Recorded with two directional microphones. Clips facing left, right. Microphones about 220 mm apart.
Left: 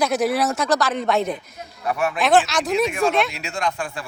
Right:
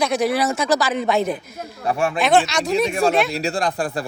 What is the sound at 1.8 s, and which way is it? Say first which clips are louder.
Speech: right 2 dB; 30° right (ahead or behind).